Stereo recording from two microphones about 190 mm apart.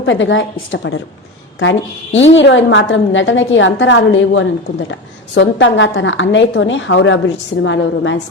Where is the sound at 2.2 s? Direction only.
75° left (ahead or behind).